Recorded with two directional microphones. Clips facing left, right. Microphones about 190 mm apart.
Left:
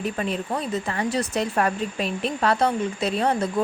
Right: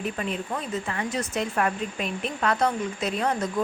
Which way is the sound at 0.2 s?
35° left (ahead or behind).